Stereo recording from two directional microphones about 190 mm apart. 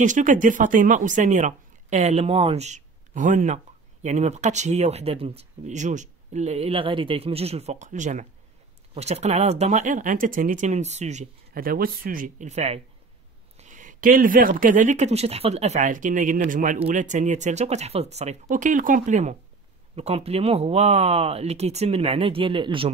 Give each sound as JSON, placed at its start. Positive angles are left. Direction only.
{"t": 0.0, "sound": "speech", "side_deg": -40}
{"t": 13.6, "sound": "a sound", "side_deg": -40}
{"t": 14.6, "sound": "speech", "side_deg": -40}